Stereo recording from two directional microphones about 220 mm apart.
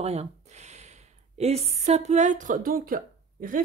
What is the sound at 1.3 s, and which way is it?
Speech, 30° right (ahead or behind).